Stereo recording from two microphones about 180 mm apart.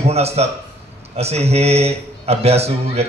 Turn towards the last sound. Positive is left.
turn(degrees=-35)  # may be behind; listen again after turning